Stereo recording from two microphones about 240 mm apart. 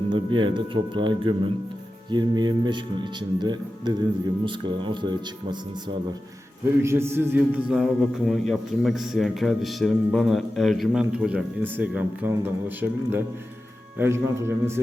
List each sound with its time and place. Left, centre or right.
0.1 s speech: centre
6.8 s a man's voice: centre